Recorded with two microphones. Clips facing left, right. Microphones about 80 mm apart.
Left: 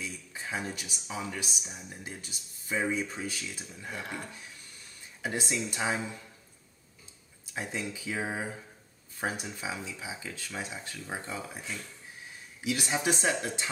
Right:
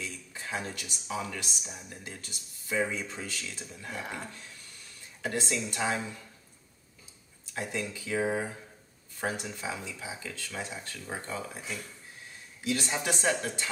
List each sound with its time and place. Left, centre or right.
0.0 s a sound: centre
1.3 s speech: centre
7.5 s speech: centre
12.6 s speech: centre